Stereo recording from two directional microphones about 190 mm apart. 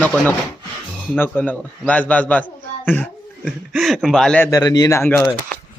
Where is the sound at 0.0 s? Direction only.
5° left (ahead or behind).